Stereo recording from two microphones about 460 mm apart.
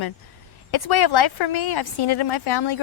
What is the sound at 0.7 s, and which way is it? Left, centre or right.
Speech, left.